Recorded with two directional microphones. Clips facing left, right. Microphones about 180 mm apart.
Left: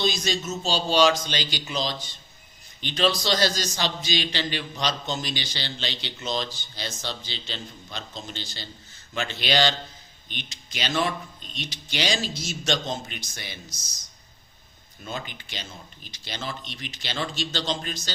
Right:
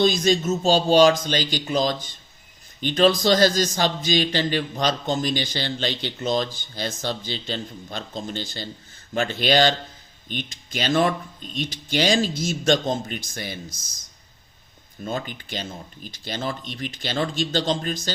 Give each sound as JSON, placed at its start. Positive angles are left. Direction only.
{"t": 0.0, "sound": "speech", "side_deg": -50}